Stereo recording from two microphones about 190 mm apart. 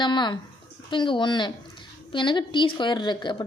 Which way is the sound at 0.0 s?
25° left (ahead or behind).